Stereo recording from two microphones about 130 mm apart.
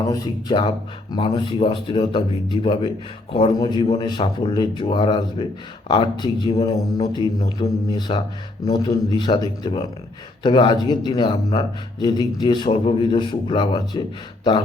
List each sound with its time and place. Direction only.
0.0 s a man's voice: 30° left (ahead or behind)